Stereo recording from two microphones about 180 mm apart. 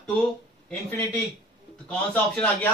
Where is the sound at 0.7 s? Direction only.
5° left (ahead or behind).